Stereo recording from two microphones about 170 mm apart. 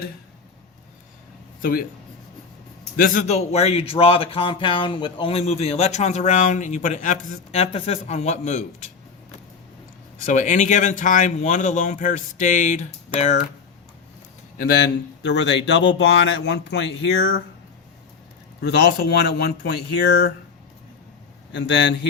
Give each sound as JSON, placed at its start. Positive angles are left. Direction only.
{"t": 2.9, "sound": "a man's voice", "side_deg": 60}
{"t": 3.2, "sound": "speech", "side_deg": 40}
{"t": 10.2, "sound": "speech", "side_deg": 45}
{"t": 14.6, "sound": "a man's voice", "side_deg": 75}
{"t": 18.6, "sound": "speech", "side_deg": 75}
{"t": 21.5, "sound": "a man's voice", "side_deg": 90}